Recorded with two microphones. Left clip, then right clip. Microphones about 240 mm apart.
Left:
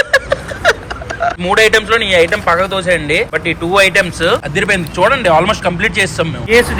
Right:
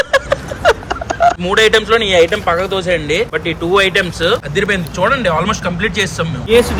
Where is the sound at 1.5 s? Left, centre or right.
Centre.